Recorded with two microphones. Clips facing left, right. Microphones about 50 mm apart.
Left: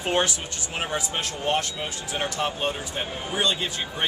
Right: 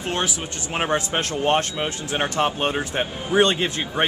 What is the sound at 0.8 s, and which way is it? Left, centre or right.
Speech, right.